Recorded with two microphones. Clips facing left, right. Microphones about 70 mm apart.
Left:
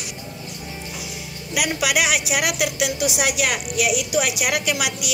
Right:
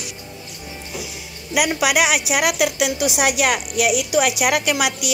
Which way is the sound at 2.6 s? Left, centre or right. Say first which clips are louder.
Right 3 dB; right.